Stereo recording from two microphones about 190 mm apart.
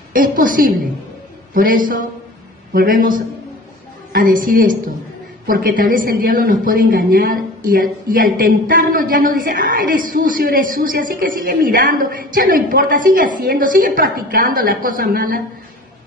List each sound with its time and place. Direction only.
0.1 s a man's voice: 45° right (ahead or behind)